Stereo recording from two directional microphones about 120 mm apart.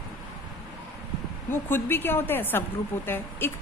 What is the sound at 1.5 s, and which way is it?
A woman's voice, 15° left (ahead or behind).